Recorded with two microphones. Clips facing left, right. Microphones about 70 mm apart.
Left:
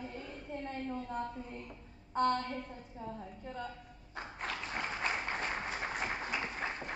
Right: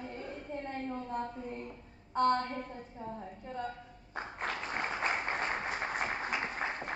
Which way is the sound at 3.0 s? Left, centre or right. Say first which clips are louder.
Even; right.